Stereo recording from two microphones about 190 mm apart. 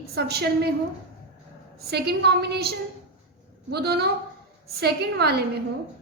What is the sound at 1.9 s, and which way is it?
A woman's voice, 60° right (ahead or behind).